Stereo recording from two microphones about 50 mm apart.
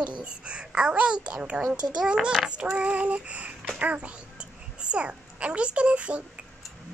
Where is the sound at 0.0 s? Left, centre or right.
Right.